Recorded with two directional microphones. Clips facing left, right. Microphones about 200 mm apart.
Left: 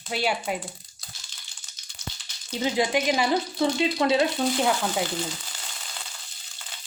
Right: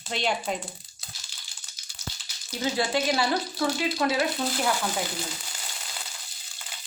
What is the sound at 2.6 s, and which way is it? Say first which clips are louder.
Speech: left 2 dB; 20° left (ahead or behind).